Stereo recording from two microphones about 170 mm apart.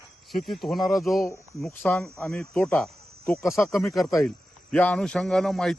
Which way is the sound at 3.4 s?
15° left (ahead or behind).